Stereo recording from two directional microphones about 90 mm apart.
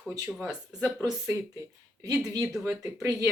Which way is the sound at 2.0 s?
40° right (ahead or behind).